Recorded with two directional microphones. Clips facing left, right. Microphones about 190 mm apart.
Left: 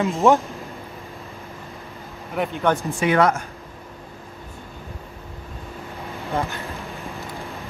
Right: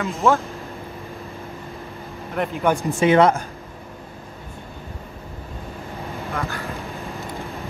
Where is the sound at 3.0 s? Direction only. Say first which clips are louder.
Right 5 dB; 25° right (ahead or behind).